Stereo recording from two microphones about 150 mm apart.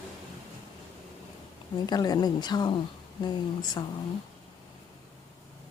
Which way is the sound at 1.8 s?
25° left (ahead or behind).